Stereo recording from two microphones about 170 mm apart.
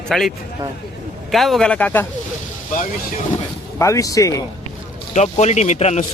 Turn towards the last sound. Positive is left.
turn(degrees=40)  # may be behind; listen again after turning